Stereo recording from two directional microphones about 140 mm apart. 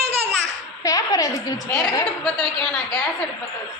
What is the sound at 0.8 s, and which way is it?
A woman's voice, 25° left (ahead or behind).